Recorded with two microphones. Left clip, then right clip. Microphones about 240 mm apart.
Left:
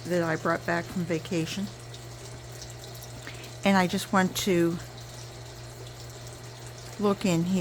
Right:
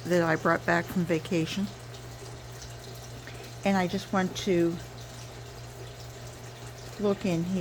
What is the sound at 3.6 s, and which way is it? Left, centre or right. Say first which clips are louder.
Speech: left 3 dB; left.